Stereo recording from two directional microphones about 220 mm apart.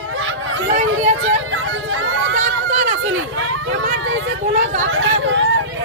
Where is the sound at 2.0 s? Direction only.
65° right (ahead or behind).